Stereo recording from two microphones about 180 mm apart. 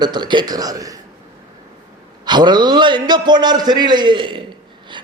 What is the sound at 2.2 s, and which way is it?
A man's voice, 25° right (ahead or behind).